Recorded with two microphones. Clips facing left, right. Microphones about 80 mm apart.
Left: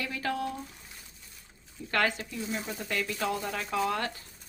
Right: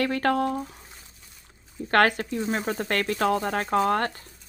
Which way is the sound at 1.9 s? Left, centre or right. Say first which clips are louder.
Right 8 dB; right.